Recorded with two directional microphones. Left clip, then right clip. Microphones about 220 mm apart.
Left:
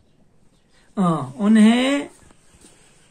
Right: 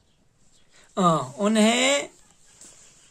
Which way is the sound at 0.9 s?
45° right (ahead or behind).